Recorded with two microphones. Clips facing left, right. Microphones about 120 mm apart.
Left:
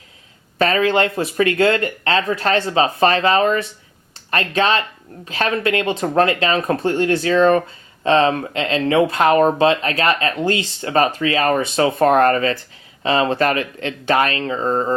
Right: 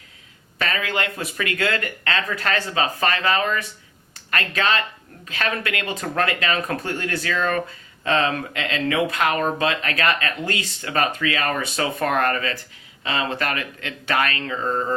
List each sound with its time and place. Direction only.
0.6 s speech: 35° left (ahead or behind)